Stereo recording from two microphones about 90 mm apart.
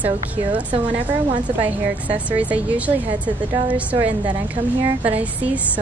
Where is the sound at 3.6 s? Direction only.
15° right (ahead or behind).